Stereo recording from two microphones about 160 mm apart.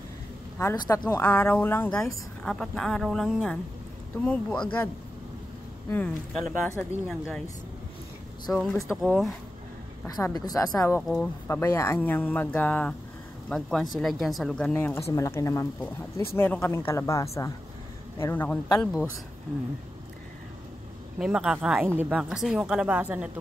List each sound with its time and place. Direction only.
0.7 s a woman's voice: 25° left (ahead or behind)
1.2 s a woman's voice: 10° left (ahead or behind)
5.9 s speech: 10° left (ahead or behind)
6.8 s a woman's voice: centre (ahead or behind)
8.5 s a woman's voice: centre (ahead or behind)
10.0 s a woman's voice: 20° left (ahead or behind)
11.0 s a woman's voice: centre (ahead or behind)
11.4 s a woman's voice: 15° left (ahead or behind)
21.2 s a woman's voice: 5° right (ahead or behind)